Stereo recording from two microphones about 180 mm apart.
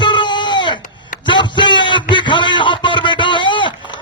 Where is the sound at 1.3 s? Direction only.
25° left (ahead or behind).